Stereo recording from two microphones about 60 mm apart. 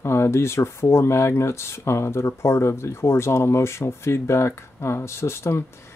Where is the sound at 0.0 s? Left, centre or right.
Left.